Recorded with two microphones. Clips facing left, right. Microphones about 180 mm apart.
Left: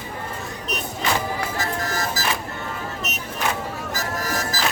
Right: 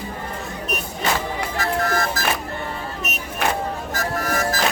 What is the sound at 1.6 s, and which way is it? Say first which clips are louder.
Music: right 4 dB; 60° right (ahead or behind).